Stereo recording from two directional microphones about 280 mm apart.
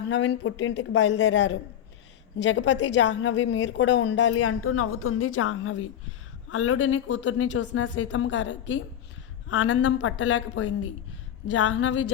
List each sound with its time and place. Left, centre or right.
0.1 s a woman's voice: left